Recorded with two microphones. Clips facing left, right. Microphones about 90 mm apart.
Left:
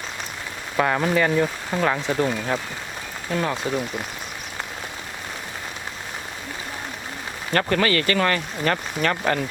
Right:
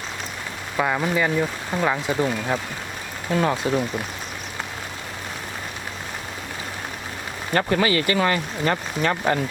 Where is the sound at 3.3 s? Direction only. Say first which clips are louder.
Right 3 dB; 20° right (ahead or behind).